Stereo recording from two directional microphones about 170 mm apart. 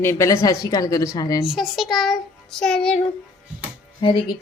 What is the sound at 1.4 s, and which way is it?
A child's voice, centre (ahead or behind).